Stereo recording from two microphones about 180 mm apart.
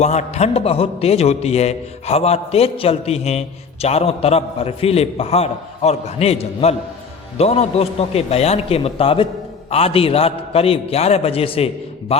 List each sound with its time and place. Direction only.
0.0 s a man's voice: 40° left (ahead or behind)